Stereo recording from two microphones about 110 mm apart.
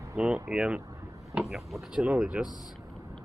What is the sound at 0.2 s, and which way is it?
Speech, 10° right (ahead or behind).